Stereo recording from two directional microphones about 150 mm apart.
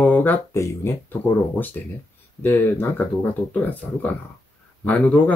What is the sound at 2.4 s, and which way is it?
Speech, 15° left (ahead or behind).